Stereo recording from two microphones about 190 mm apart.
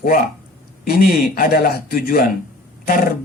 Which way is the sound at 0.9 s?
50° left (ahead or behind).